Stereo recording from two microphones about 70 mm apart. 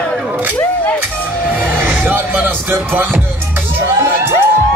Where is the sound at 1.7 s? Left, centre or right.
Right.